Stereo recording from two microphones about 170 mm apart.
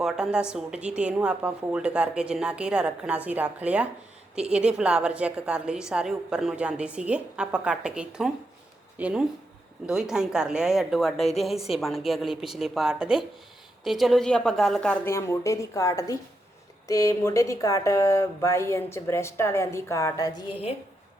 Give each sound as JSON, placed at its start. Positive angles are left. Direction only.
{"t": 0.0, "sound": "a woman's voice", "side_deg": -5}
{"t": 15.1, "sound": "speech", "side_deg": 20}